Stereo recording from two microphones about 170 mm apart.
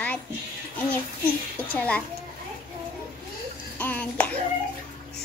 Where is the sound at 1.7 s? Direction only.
10° left (ahead or behind).